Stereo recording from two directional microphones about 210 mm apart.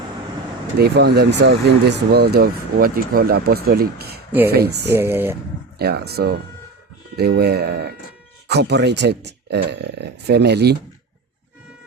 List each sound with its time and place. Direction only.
0.8 s speech: 50° right (ahead or behind)
4.9 s speech: 10° right (ahead or behind)
5.8 s speech: 50° right (ahead or behind)